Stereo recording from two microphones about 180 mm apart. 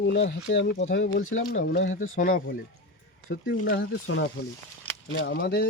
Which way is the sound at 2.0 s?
50° left (ahead or behind).